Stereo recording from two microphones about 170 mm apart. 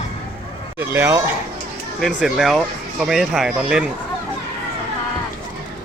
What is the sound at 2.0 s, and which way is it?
Speech, centre (ahead or behind).